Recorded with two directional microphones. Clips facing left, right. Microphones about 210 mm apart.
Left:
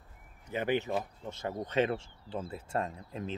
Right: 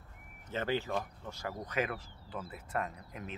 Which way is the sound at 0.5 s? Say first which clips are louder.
Left 3 dB; 15° left (ahead or behind).